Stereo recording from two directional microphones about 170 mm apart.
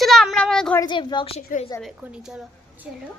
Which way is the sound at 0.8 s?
25° left (ahead or behind).